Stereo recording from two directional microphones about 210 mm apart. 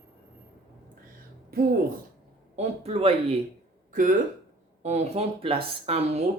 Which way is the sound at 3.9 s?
40° right (ahead or behind).